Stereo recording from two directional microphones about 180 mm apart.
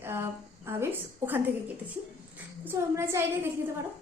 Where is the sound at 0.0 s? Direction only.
15° right (ahead or behind).